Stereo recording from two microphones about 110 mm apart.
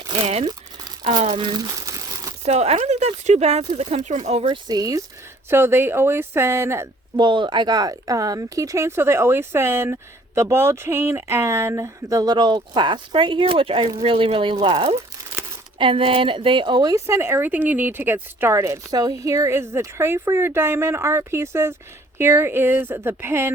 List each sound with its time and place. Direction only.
0.1 s crumpling: 65° right (ahead or behind)
1.3 s crumpling: 45° right (ahead or behind); by 2.3 s 30° right (ahead or behind)
2.4 s speech: 85° right
4.5 s speech: 35° right (ahead or behind)
5.5 s speech: 20° right (ahead or behind)
7.2 s speech: 45° right (ahead or behind)
15.3 s crumpling: 15° right (ahead or behind)
15.8 s a woman's voice: 55° right (ahead or behind)
16.9 s speech: 25° right (ahead or behind)